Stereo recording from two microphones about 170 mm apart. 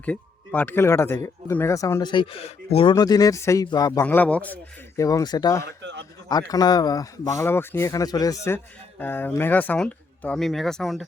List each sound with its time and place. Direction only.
0.0 s speech: 10° left (ahead or behind); by 2.9 s 35° left (ahead or behind)
2.9 s speech: 20° left (ahead or behind)
4.0 s speech: 10° left (ahead or behind)
5.6 s a man's voice: 90° right
6.2 s speech: 20° left (ahead or behind); by 11.0 s centre (ahead or behind)